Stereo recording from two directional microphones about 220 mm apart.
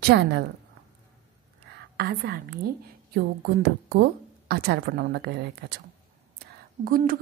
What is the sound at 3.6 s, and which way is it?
A woman's voice, 45° right (ahead or behind).